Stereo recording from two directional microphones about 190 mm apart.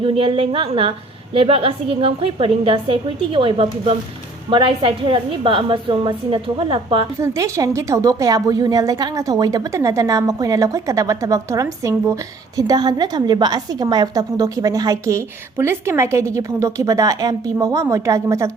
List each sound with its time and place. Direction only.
0.0 s a woman's voice: 25° right (ahead or behind)
7.2 s a woman's voice: 15° right (ahead or behind)